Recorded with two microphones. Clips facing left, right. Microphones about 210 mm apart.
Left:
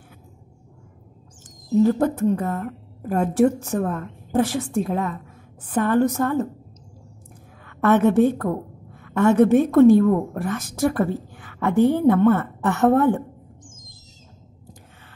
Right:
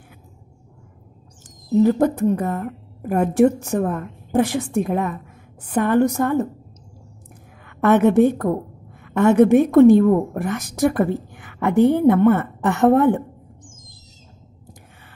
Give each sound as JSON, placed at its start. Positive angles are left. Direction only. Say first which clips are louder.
{"t": 1.8, "sound": "a woman's voice", "louder": "right 2 dB", "side_deg": -15}
{"t": 7.6, "sound": "a woman's voice", "louder": "right 2 dB", "side_deg": -15}